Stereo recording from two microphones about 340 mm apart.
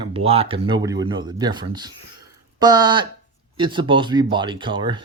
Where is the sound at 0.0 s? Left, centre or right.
Centre.